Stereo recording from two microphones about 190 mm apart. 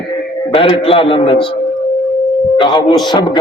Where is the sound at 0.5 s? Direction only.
30° left (ahead or behind).